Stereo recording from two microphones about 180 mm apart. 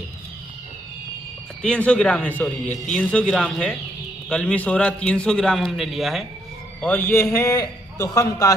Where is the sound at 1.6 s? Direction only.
5° left (ahead or behind).